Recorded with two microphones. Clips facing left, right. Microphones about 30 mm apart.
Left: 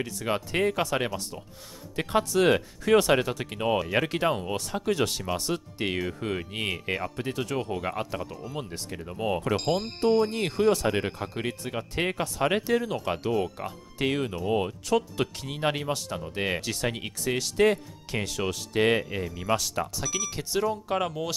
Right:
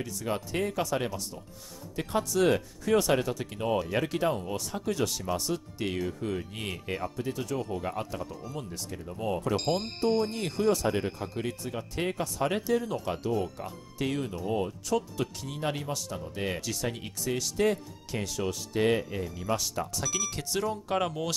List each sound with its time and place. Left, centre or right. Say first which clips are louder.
0.0 s speech: left 3 dB; left
8.3 s speech: left 2 dB; left
8.5 s speech: left 4 dB; left
9.7 s speech: left 2 dB; centre
10.1 s speech: left 4 dB; centre
10.7 s speech: left 2 dB; left
13.7 s speech: left 4 dB; left
19.9 s speech: left 1 dB; centre